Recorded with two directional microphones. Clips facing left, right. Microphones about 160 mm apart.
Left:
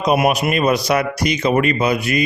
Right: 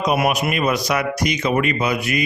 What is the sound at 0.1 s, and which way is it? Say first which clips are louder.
A man's voice: left 5 dB; 25° left (ahead or behind).